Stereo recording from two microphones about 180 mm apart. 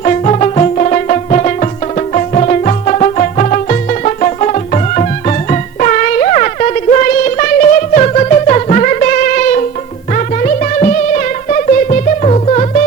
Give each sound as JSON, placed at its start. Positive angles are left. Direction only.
{"t": 0.0, "sound": "music", "side_deg": 40}